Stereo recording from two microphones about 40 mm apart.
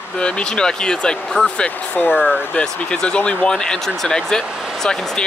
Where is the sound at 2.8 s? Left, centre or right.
Left.